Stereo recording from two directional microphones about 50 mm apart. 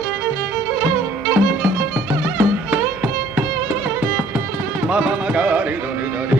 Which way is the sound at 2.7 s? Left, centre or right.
Right.